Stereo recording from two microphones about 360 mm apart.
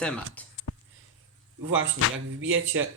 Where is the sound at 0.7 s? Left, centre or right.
Left.